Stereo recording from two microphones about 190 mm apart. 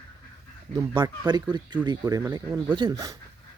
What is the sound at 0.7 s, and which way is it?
Speech, 25° right (ahead or behind).